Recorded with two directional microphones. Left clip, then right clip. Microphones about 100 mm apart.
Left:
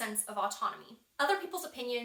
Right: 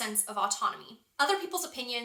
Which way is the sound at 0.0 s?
25° right (ahead or behind).